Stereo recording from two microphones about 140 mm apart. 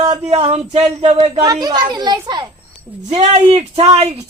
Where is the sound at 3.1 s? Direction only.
45° right (ahead or behind).